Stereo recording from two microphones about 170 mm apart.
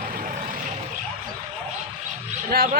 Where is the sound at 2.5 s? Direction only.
65° right (ahead or behind).